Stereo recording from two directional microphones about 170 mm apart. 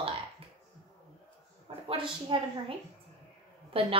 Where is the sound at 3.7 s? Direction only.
35° right (ahead or behind).